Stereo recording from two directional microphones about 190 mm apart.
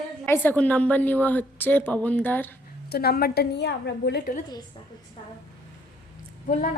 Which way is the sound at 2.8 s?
55° left (ahead or behind).